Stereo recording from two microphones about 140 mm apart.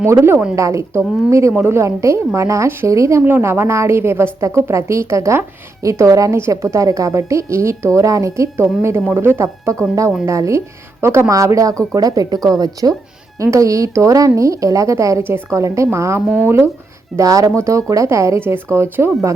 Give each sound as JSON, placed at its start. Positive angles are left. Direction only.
{"t": 0.0, "sound": "a woman's voice", "side_deg": -15}
{"t": 11.7, "sound": "speech", "side_deg": 5}
{"t": 11.9, "sound": "a woman's voice", "side_deg": -25}